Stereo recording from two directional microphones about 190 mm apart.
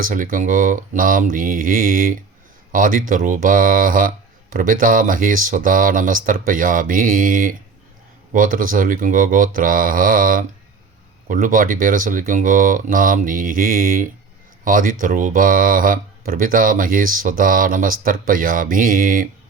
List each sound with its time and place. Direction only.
0.0 s speech: 45° right (ahead or behind)